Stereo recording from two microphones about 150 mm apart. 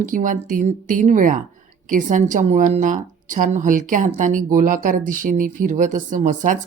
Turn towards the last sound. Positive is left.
turn(degrees=-55)  # may be behind; listen again after turning